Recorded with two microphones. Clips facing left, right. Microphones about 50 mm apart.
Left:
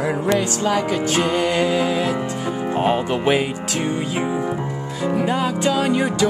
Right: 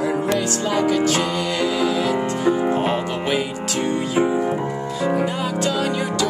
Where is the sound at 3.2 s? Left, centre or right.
Left.